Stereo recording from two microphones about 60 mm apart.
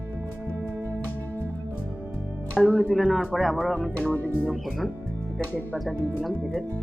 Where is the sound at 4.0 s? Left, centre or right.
Left.